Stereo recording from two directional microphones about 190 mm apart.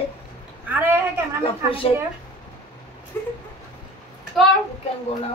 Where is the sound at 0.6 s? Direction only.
10° right (ahead or behind).